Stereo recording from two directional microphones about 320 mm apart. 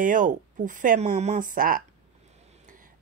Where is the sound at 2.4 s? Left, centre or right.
Right.